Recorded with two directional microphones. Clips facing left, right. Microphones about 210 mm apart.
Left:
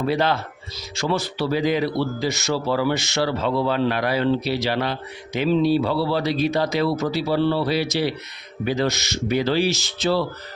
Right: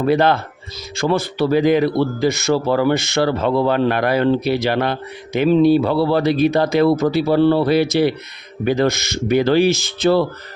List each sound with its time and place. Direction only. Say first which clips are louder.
0.0 s speech: right 6 dB; 55° right (ahead or behind)